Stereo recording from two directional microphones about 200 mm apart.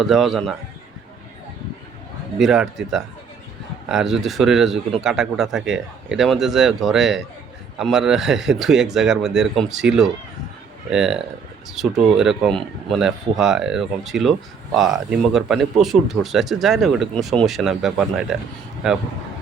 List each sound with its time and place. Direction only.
0.0 s speech: centre (ahead or behind)
2.4 s speech: centre (ahead or behind)